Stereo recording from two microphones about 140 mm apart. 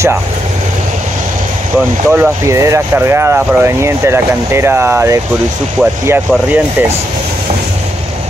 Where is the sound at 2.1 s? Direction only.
15° right (ahead or behind).